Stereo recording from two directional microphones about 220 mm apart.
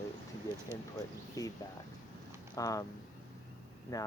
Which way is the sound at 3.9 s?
15° left (ahead or behind).